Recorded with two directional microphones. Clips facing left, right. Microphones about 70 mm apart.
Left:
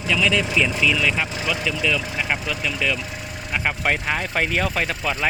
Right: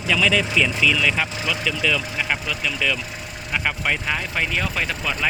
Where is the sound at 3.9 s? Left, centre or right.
Left.